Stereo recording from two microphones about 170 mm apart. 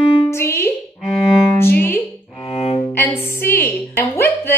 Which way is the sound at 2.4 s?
35° left (ahead or behind).